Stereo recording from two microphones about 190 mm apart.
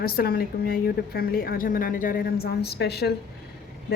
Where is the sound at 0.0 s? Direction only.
55° left (ahead or behind).